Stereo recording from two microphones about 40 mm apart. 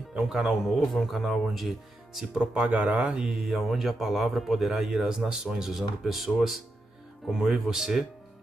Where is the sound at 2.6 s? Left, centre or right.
Right.